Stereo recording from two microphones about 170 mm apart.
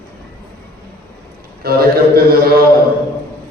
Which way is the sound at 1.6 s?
60° right (ahead or behind).